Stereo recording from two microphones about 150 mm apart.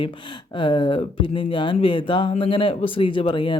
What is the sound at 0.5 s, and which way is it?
Speech, 30° left (ahead or behind).